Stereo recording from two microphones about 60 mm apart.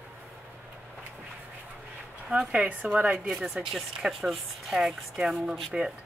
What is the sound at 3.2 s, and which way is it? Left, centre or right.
Speech, centre.